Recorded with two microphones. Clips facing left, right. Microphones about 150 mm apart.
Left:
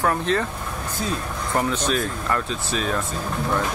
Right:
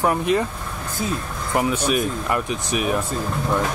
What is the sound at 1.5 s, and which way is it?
Speech, 10° right (ahead or behind).